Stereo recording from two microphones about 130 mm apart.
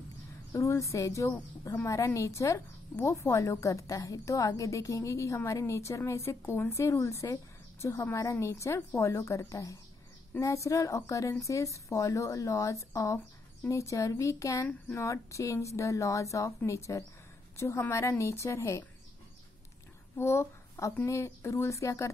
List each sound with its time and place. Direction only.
0.5 s a woman's voice: 25° left (ahead or behind)
20.2 s a woman's voice: 20° left (ahead or behind)